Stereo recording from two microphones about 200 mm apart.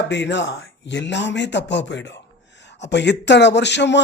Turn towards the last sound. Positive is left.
turn(degrees=60)  # may be behind; listen again after turning